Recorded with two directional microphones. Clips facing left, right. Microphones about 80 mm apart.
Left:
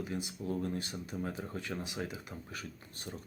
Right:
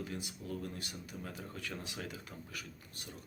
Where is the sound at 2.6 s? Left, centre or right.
Left.